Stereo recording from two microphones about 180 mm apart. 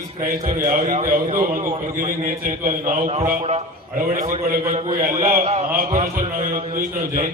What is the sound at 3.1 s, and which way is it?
Speech, 35° right (ahead or behind).